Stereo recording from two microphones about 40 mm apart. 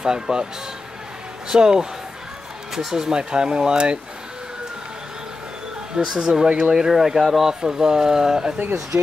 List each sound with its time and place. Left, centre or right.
0.0 s speech: centre
1.5 s speech: centre
5.9 s speech: centre
7.6 s speech: centre